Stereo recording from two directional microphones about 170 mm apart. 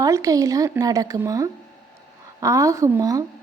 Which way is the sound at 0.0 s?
20° right (ahead or behind).